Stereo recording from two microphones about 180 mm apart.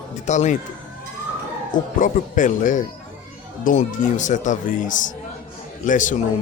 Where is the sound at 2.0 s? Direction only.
45° left (ahead or behind).